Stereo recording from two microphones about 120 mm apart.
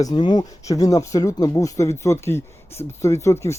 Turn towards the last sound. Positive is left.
turn(degrees=25)  # may be behind; listen again after turning